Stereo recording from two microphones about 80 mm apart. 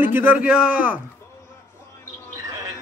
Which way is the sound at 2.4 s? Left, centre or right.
Right.